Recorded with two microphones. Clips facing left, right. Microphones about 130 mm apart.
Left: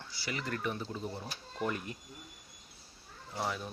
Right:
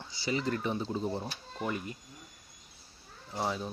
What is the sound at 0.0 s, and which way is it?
Speech, 20° right (ahead or behind).